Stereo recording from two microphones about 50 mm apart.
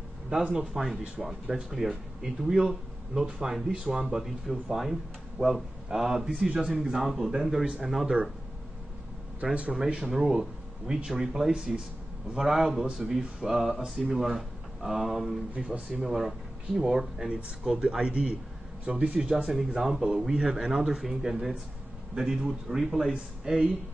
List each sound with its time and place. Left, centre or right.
0.3 s speech: centre
7.9 s speech: centre
9.4 s speech: centre
12.8 s speech: centre
13.4 s a man's voice: centre; by 19.1 s right
19.1 s speech: centre